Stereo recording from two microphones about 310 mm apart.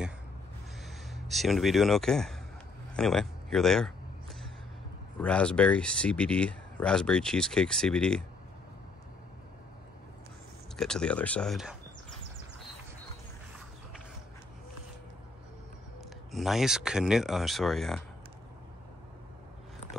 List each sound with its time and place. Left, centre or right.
0.8 s speech: centre
3.0 s a sound: centre
5.2 s speech: centre
10.8 s speech: centre
16.3 s speech: centre